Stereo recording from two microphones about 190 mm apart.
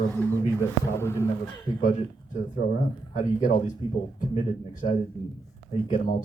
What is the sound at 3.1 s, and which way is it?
Speech, 45° left (ahead or behind).